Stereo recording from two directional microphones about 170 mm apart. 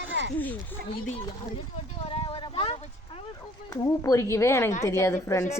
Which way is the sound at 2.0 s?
35° left (ahead or behind).